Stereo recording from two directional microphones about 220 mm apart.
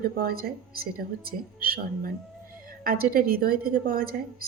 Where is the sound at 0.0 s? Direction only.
40° right (ahead or behind).